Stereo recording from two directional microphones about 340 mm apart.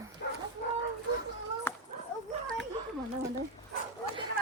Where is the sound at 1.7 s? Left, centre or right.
Centre.